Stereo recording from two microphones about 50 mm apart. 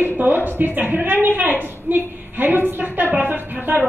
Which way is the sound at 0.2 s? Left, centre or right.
Right.